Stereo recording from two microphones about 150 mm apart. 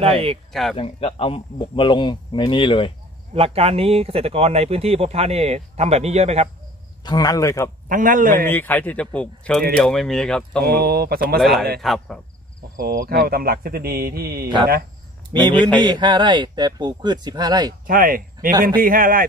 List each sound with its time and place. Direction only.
0.0 s speech: 40° right (ahead or behind)
0.5 s speech: centre (ahead or behind)
0.7 s speech: 40° left (ahead or behind)
3.3 s speech: 40° right (ahead or behind)
7.1 s speech: 25° left (ahead or behind)
7.9 s a man's voice: 65° right (ahead or behind)
8.5 s speech: 15° left (ahead or behind)
10.6 s speech: 90° right
11.8 s speech: centre (ahead or behind)
12.7 s speech: 70° right (ahead or behind); by 14.5 s 90° right
15.4 s speech: 30° right (ahead or behind)
17.8 s a man's voice: 65° right (ahead or behind)